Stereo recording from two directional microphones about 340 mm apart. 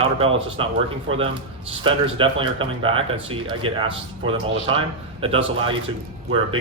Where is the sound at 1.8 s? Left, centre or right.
Centre.